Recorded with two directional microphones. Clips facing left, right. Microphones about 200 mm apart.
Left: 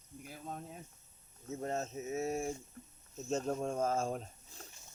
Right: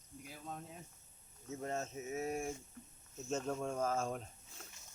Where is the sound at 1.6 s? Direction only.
35° left (ahead or behind).